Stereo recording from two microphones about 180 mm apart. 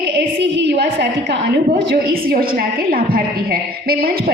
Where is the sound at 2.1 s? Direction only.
55° right (ahead or behind).